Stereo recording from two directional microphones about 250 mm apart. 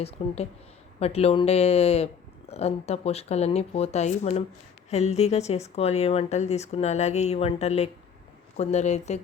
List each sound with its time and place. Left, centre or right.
0.2 s speech: left